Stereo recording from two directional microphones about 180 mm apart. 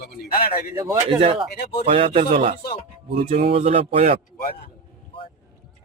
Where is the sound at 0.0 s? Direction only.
60° left (ahead or behind).